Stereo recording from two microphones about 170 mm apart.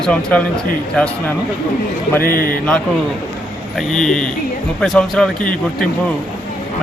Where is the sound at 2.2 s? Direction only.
60° left (ahead or behind).